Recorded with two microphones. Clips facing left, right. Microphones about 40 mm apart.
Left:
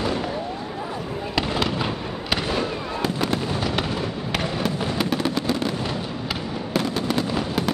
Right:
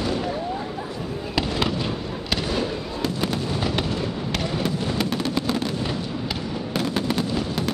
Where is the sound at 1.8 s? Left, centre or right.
Centre.